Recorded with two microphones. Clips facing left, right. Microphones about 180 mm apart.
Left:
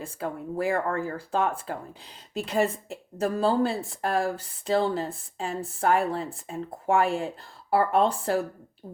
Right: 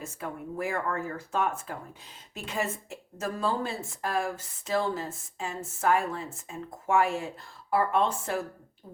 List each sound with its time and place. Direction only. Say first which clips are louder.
0.0 s a woman's voice: left 4 dB; 30° left (ahead or behind)